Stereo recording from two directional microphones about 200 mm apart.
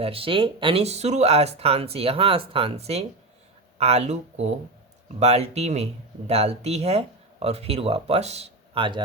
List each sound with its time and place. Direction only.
0.0 s speech: 25° right (ahead or behind)